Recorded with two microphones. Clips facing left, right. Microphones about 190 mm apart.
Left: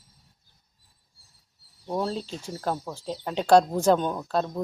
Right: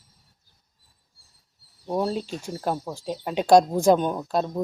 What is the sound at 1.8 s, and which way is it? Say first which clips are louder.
Speech: right 3 dB; 15° right (ahead or behind).